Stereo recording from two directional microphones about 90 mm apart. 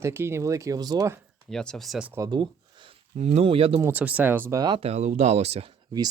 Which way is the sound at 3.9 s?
15° right (ahead or behind).